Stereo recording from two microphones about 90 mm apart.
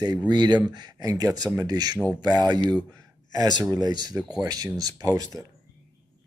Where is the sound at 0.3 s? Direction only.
55° right (ahead or behind).